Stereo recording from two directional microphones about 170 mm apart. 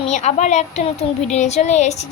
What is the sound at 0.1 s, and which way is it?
A woman's voice, 45° left (ahead or behind).